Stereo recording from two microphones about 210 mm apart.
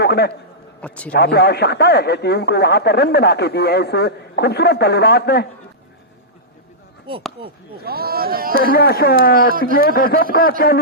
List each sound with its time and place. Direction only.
0.0 s a man's voice: 50° left (ahead or behind)
0.8 s a man's voice: 5° left (ahead or behind)
1.2 s speech: 50° left (ahead or behind)
7.1 s speech: 25° right (ahead or behind)
7.9 s speech: 45° right (ahead or behind)
8.6 s speech: 45° left (ahead or behind)